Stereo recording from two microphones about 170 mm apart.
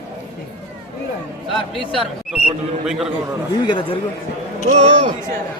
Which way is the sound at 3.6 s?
30° left (ahead or behind).